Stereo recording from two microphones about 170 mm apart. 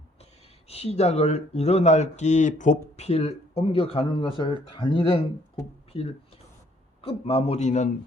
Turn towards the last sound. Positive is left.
turn(degrees=45)  # may be behind; listen again after turning